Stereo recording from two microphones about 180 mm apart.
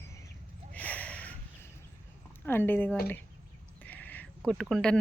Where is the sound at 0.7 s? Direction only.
10° left (ahead or behind).